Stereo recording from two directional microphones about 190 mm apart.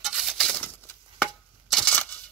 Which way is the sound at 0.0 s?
Centre (ahead or behind).